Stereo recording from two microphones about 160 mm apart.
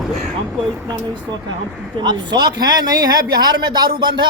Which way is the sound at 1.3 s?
25° right (ahead or behind).